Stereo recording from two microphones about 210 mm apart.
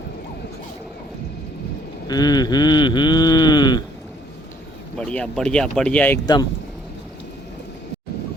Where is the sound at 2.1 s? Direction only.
20° left (ahead or behind).